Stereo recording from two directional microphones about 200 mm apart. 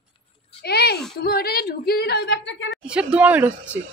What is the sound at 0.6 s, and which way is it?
A woman's voice, 55° left (ahead or behind).